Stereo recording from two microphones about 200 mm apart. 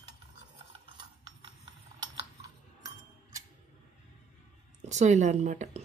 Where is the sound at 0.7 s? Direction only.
20° right (ahead or behind).